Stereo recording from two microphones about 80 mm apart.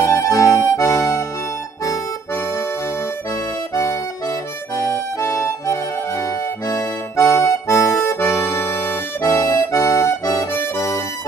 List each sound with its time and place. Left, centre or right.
0.0 s accordion: left
4.7 s accordion: left